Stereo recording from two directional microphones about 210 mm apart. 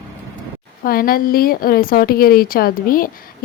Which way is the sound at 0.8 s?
45° left (ahead or behind).